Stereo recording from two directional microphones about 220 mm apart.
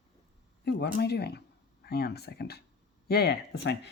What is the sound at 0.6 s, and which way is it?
Speech, 45° left (ahead or behind).